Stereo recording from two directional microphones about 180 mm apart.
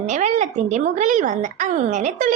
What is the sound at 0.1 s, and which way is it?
A woman's voice, 40° right (ahead or behind).